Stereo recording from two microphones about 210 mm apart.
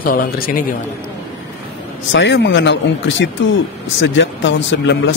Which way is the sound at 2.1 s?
60° left (ahead or behind).